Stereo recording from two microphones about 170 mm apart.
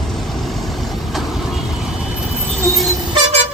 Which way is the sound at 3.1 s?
40° right (ahead or behind).